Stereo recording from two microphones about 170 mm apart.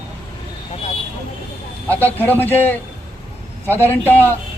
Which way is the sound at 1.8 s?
10° left (ahead or behind).